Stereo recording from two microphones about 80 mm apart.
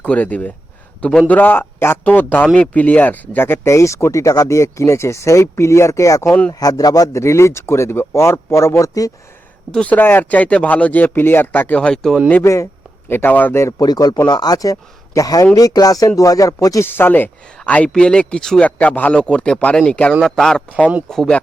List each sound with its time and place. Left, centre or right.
0.0 s speech: centre; by 6.2 s left
6.2 s speech: centre
6.5 s speech: left
9.7 s speech: centre
10.0 s speech: left
11.8 s speech: centre
12.4 s speech: left
13.1 s speech: left
13.6 s speech: left
13.8 s speech: left
16.8 s speech: left; by 18.6 s centre
18.6 s speech: centre